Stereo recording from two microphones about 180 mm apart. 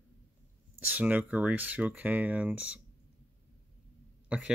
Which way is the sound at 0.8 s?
10° right (ahead or behind).